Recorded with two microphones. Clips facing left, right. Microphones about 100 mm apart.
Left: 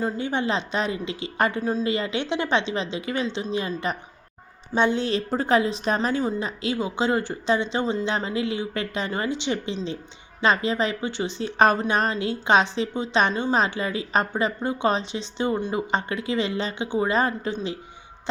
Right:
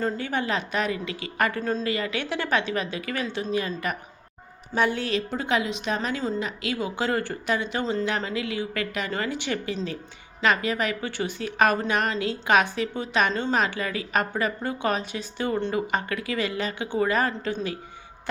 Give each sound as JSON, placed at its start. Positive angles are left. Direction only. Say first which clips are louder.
{"t": 0.2, "sound": "a woman's voice", "louder": "left 2 dB", "side_deg": 25}
{"t": 4.7, "sound": "a woman's voice", "louder": "left 2 dB", "side_deg": 25}